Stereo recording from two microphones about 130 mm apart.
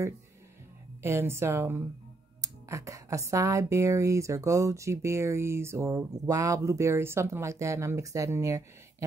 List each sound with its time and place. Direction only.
1.0 s speech: 20° right (ahead or behind)